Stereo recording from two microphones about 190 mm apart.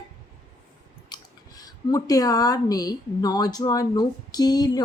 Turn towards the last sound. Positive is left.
turn(degrees=20)  # may be behind; listen again after turning